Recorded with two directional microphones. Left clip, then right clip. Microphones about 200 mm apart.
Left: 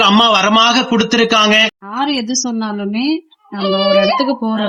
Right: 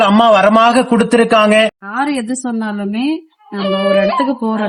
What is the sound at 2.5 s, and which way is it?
Speech, 10° right (ahead or behind).